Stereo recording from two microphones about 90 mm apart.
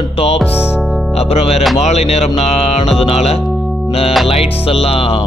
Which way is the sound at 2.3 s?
90° left.